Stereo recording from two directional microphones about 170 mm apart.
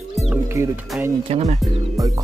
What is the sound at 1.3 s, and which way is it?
Speech, 40° right (ahead or behind).